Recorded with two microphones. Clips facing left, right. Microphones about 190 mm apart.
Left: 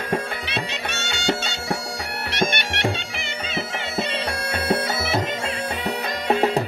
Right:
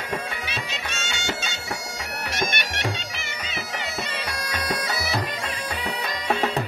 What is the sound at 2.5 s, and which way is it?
Bagpipes, 60° left (ahead or behind).